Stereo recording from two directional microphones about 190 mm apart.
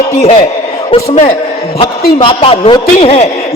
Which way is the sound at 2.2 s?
25° left (ahead or behind).